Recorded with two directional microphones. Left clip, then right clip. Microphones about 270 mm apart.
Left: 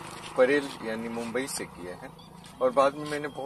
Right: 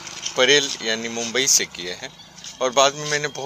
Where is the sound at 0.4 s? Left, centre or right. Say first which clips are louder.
Right 7 dB; right.